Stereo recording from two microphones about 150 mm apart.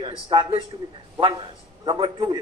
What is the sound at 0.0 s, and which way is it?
Speech, 35° right (ahead or behind).